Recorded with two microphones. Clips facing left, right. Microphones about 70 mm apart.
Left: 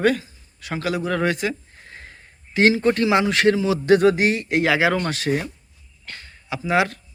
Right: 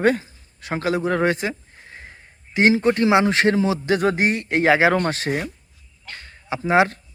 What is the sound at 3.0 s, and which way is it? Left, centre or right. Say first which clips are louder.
A man's voice: right 1 dB; right.